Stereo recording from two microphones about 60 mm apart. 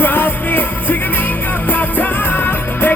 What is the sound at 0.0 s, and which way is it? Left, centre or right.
Music, left.